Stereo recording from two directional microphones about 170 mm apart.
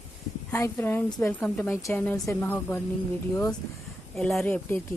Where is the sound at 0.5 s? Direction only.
15° left (ahead or behind).